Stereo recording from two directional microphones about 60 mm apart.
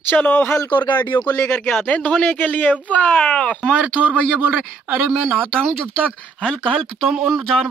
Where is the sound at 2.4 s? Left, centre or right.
Left.